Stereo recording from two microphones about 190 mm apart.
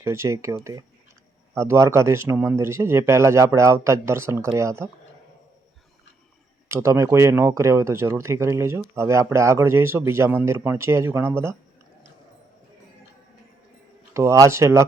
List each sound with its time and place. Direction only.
0.0 s speech: 15° right (ahead or behind)
6.7 s speech: 15° right (ahead or behind)
14.1 s speech: 15° right (ahead or behind)